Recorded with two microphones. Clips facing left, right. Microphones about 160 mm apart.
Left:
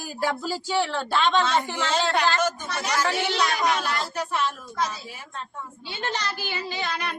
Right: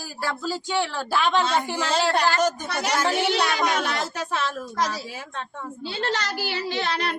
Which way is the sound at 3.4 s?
75° right (ahead or behind).